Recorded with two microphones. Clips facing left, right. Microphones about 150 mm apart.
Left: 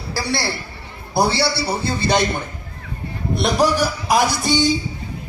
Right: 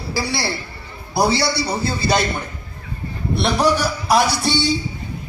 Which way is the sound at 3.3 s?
45° left (ahead or behind).